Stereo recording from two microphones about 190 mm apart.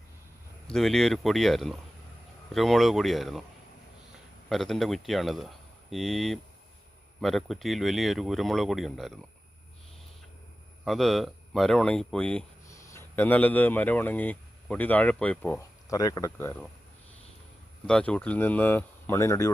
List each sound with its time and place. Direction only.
0.7 s speech: centre (ahead or behind)
4.4 s speech: centre (ahead or behind)
10.8 s speech: centre (ahead or behind)
12.6 s speech: 15° left (ahead or behind)
17.8 s speech: 5° left (ahead or behind)